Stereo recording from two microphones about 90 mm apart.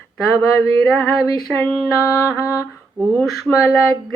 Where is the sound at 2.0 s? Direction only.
35° left (ahead or behind).